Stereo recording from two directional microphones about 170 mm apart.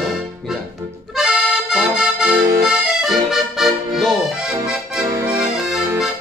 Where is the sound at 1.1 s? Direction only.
5° right (ahead or behind).